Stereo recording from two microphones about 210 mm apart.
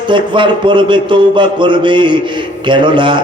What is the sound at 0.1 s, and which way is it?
A man's voice, 25° right (ahead or behind).